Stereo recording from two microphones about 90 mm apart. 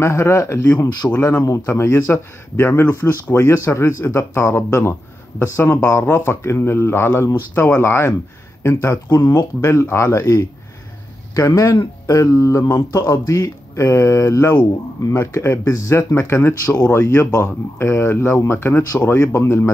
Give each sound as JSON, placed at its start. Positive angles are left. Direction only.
{"t": 0.0, "sound": "speech", "side_deg": 30}
{"t": 9.1, "sound": "speech", "side_deg": 45}